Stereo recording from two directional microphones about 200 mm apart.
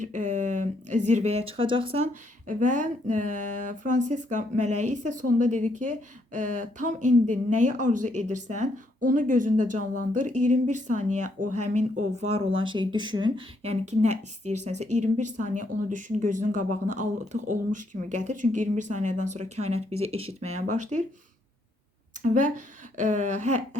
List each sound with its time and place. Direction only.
0.0 s speech: 40° right (ahead or behind)
2.5 s speech: 40° right (ahead or behind)
22.2 s speech: 40° right (ahead or behind)